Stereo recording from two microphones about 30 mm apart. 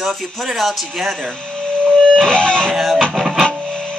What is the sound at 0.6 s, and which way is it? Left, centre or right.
Speech, centre.